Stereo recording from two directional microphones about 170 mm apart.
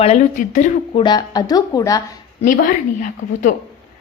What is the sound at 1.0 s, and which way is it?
Speech, 25° left (ahead or behind).